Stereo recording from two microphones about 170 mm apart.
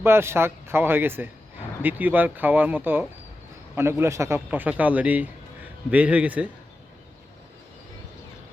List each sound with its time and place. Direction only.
0.0 s speech: 15° right (ahead or behind)